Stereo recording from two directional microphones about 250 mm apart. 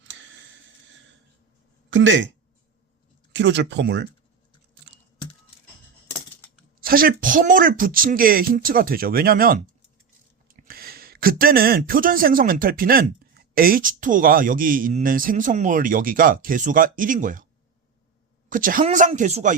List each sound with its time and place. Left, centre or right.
0.0 s tick-tock: right
1.9 s speech: right
3.3 s speech: right
4.8 s typing: right
6.7 s speech: right
18.4 s speech: right